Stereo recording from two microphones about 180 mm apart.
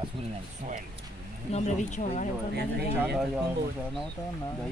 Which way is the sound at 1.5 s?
40° left (ahead or behind).